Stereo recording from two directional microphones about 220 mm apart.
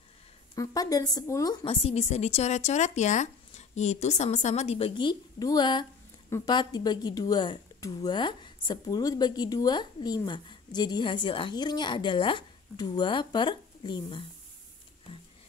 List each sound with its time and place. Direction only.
0.6 s speech: 15° left (ahead or behind)